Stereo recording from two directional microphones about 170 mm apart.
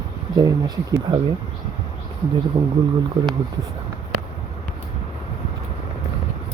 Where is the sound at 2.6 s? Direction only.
15° right (ahead or behind).